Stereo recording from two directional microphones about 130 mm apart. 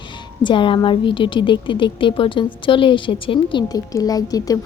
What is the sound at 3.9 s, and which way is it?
Speech, 30° left (ahead or behind).